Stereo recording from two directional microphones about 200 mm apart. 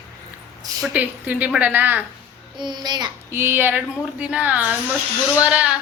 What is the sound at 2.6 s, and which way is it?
A child's voice, 20° right (ahead or behind).